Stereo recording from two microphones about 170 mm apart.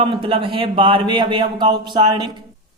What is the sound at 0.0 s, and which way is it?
Speech, 30° right (ahead or behind).